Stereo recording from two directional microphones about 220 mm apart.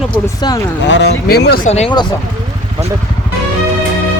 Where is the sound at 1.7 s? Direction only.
25° left (ahead or behind).